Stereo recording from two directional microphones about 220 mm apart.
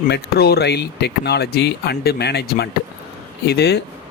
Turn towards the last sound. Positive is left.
turn(degrees=45)  # may be behind; listen again after turning